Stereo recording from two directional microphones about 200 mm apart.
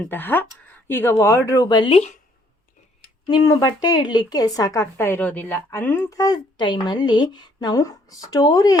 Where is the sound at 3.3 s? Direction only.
20° left (ahead or behind).